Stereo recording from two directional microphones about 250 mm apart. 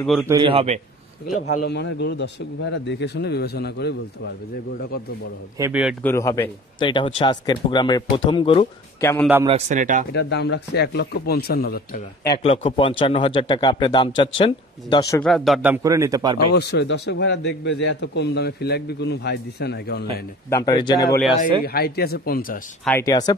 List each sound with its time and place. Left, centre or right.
0.0 s a man's voice: centre
0.3 s a man's voice: right
1.4 s a man's voice: left
5.6 s a man's voice: centre
6.0 s speech: centre
9.5 s speech: right
10.1 s a man's voice: left
12.3 s a man's voice: left
15.2 s a man's voice: centre
16.5 s a man's voice: left
20.4 s speech: centre
21.6 s a man's voice: left
22.8 s speech: centre